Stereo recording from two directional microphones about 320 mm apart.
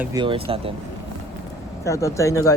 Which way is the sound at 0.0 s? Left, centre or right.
Centre.